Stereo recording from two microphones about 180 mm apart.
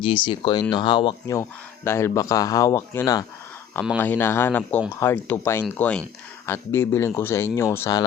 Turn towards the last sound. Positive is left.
turn(degrees=15)  # may be behind; listen again after turning